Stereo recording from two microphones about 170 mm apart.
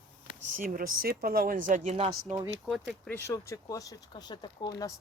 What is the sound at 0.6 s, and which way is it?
Speech, 60° right (ahead or behind).